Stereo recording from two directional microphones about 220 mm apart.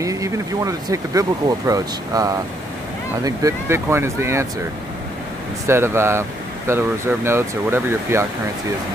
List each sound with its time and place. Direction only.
0.0 s vehicle: 15° right (ahead or behind)
1.7 s speech: 15° right (ahead or behind)
5.7 s speech: 10° right (ahead or behind)